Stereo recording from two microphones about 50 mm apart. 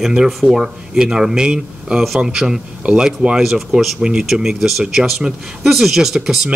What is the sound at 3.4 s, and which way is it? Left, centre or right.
A man's voice, centre.